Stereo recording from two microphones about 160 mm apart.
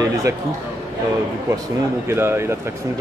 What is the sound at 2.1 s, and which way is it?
Speech, 15° right (ahead or behind).